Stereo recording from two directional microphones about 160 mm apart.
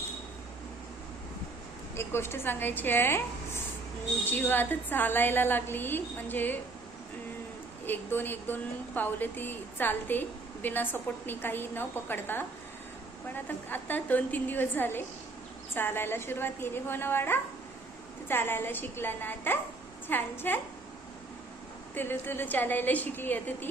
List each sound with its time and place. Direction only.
2.0 s speech: 15° left (ahead or behind)
7.9 s speech: 10° left (ahead or behind)
21.9 s speech: 15° left (ahead or behind)